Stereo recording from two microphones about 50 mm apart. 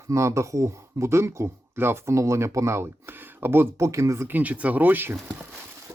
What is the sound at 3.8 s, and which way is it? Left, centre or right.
Speech, right.